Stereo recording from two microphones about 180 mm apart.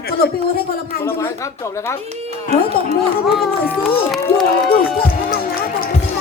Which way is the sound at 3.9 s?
Centre (ahead or behind).